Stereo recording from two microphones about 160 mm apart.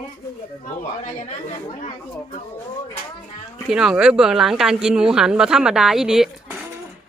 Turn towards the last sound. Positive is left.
turn(degrees=-5)  # may be behind; listen again after turning